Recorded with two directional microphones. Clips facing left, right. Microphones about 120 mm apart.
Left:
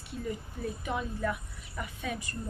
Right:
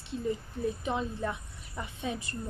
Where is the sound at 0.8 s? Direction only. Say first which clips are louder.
Even; 25° right (ahead or behind).